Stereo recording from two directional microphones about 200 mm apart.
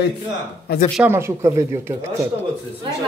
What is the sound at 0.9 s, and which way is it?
Speech, 10° right (ahead or behind).